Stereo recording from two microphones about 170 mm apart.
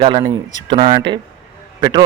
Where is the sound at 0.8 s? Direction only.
55° right (ahead or behind).